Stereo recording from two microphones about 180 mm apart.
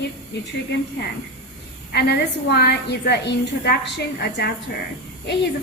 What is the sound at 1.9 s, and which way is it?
A woman's voice, 65° left (ahead or behind).